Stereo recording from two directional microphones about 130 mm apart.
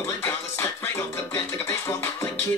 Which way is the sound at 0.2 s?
20° left (ahead or behind).